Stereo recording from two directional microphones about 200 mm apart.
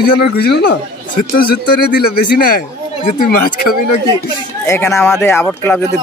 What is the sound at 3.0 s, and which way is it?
Speech, 45° left (ahead or behind).